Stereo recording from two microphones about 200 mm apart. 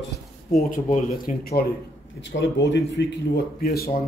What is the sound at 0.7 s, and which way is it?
Speech, 40° left (ahead or behind).